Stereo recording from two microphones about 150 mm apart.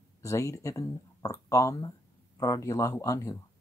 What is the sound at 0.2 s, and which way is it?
Speech, 20° left (ahead or behind).